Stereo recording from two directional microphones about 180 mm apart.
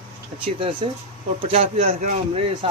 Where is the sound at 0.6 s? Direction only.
30° right (ahead or behind).